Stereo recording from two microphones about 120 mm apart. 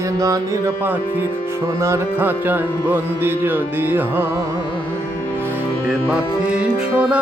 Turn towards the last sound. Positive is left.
turn(degrees=-10)  # may be behind; listen again after turning